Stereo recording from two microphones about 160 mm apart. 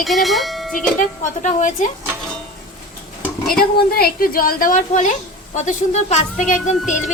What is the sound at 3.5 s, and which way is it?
Speech, 70° left (ahead or behind).